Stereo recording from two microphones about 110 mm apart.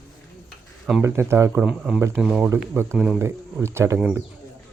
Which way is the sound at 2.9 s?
5° right (ahead or behind).